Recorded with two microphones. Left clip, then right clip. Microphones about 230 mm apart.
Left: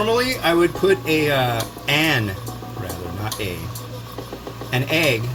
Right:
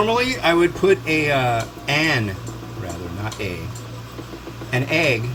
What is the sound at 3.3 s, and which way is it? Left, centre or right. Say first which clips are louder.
Speech: left 1 dB; centre.